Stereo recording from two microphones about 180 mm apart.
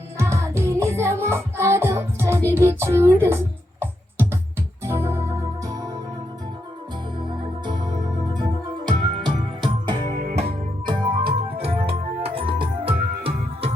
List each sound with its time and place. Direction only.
0.2 s music: 15° right (ahead or behind)
7.2 s music: 25° right (ahead or behind)
11.3 s organ: 30° right (ahead or behind)